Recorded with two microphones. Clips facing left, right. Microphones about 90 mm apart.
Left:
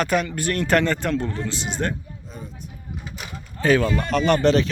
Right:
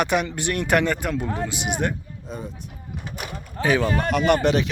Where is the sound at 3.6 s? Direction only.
15° right (ahead or behind).